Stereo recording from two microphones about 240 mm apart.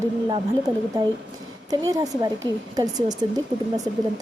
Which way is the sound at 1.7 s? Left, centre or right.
Centre.